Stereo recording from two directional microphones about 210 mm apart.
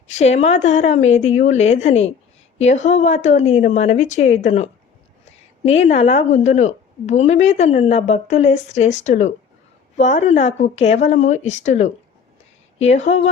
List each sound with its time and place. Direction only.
0.1 s a woman's voice: 30° left (ahead or behind)